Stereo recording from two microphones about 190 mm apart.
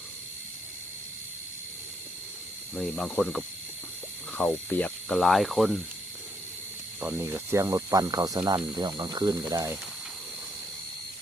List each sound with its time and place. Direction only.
2.7 s speech: 5° left (ahead or behind)
7.0 s speech: 10° right (ahead or behind)